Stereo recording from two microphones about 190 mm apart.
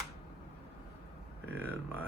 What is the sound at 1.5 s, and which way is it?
Speech, 10° right (ahead or behind).